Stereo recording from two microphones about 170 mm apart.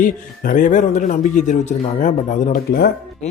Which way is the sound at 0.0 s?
50° left (ahead or behind).